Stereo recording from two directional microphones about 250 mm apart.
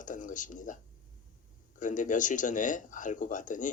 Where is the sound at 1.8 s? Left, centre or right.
Left.